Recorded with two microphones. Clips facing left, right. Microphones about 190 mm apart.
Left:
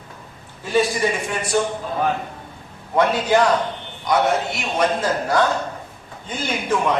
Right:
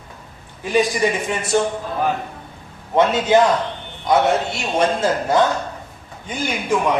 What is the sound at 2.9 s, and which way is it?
A man's voice, 25° right (ahead or behind).